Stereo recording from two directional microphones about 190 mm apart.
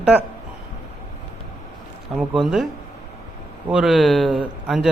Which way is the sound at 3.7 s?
Centre (ahead or behind).